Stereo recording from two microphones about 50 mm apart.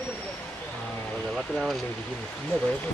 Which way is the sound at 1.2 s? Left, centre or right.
Centre.